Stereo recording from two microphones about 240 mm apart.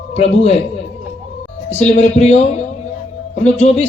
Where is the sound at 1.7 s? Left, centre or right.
Left.